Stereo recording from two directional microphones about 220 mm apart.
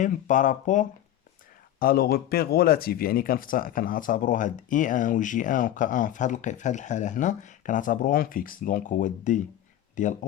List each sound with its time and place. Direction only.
0.0 s speech: 35° left (ahead or behind)